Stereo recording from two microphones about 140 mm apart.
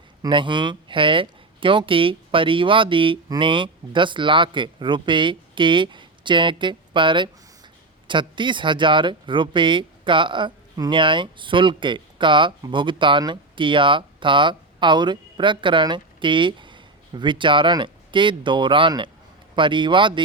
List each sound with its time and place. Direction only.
0.2 s speech: 35° right (ahead or behind)